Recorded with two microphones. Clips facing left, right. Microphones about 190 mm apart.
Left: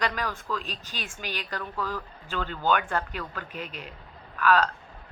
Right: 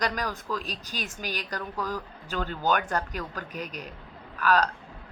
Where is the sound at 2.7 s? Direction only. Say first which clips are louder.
Left 1 dB; 40° right (ahead or behind).